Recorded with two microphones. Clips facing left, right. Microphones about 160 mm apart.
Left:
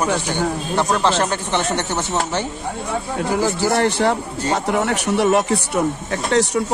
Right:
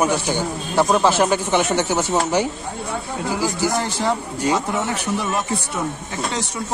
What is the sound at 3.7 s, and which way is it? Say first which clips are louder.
Speech: left 4 dB; 65° left (ahead or behind).